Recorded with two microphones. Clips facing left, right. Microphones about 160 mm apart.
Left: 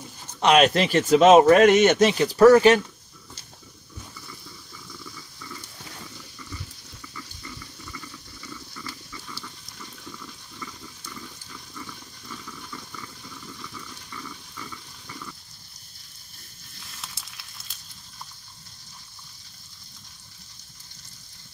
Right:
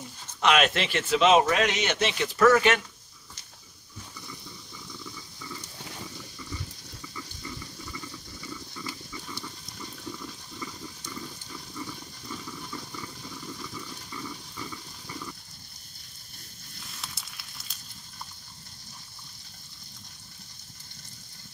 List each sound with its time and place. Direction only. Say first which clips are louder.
0.4 s speech: left 5 dB; 35° left (ahead or behind)
8.8 s pig: right 1 dB; 20° right (ahead or behind)
11.8 s toilet flush: right 4 dB; 20° right (ahead or behind)
14.6 s pig: right 1 dB; 15° right (ahead or behind)
16.9 s fire: left 1 dB; centre (ahead or behind)